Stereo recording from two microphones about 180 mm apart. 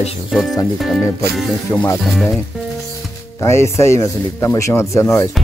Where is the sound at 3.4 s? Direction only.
15° left (ahead or behind).